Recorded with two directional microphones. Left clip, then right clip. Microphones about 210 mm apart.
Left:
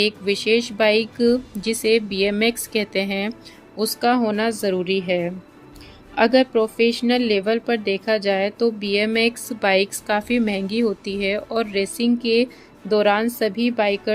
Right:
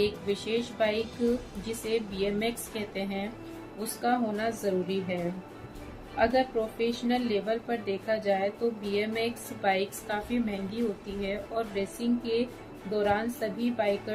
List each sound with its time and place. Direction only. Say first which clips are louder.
0.0 s a woman's voice: left 9 dB; 45° left (ahead or behind)
6.1 s a woman's voice: left 9 dB; 45° left (ahead or behind)